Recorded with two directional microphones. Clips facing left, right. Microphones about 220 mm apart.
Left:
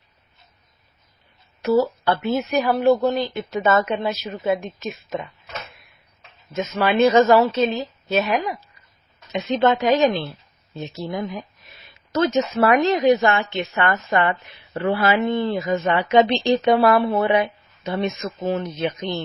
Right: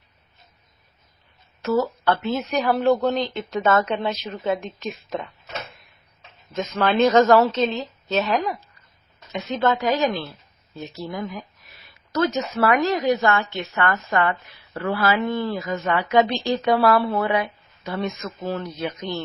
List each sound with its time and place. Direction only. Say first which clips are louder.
1.6 s a woman's voice: left 3 dB; 10° left (ahead or behind)
6.5 s a woman's voice: left 1 dB; 5° left (ahead or behind)